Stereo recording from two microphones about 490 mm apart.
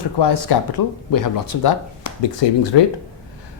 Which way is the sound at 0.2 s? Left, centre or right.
Left.